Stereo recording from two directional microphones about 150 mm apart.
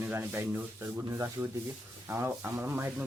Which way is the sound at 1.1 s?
20° right (ahead or behind).